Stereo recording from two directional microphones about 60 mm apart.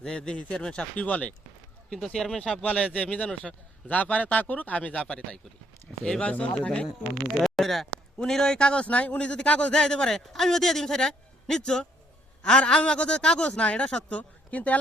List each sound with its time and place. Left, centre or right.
0.0 s a man's voice: centre
1.0 s speech: left
1.9 s speech: centre
7.3 s a man's voice: centre; by 14.8 s left